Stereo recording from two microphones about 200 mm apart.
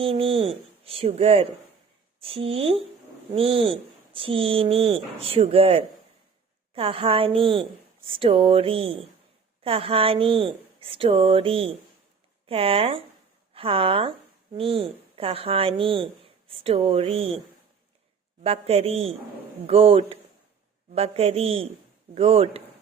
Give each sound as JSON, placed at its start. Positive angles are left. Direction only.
{"t": 0.0, "sound": "a woman's voice", "side_deg": -25}
{"t": 18.4, "sound": "a man's voice", "side_deg": -30}